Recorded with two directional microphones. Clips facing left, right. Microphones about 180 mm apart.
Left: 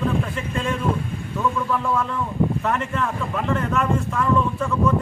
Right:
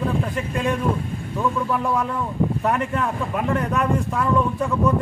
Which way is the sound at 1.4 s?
15° right (ahead or behind).